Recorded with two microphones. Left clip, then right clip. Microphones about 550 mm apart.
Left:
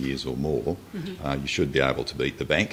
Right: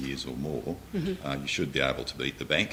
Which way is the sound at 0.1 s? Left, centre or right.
Left.